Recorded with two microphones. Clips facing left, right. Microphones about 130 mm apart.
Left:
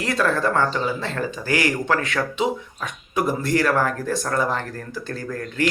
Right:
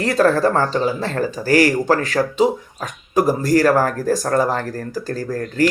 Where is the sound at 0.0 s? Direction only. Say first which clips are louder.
Right 6 dB; 40° right (ahead or behind).